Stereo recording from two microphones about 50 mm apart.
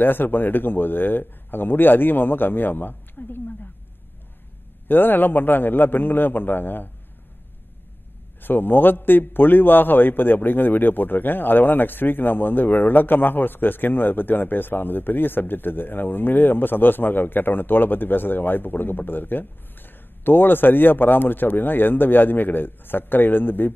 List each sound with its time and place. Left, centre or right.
0.0 s a man's voice: left
4.8 s a man's voice: left
8.4 s a man's voice: left